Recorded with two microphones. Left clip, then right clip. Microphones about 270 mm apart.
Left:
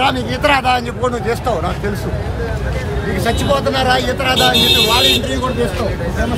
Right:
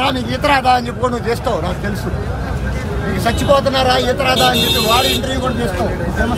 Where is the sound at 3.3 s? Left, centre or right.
Centre.